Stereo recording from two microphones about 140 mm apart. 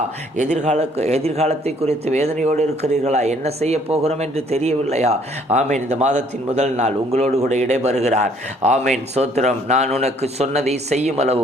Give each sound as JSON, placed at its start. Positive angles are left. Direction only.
{"t": 0.3, "sound": "speech", "side_deg": -60}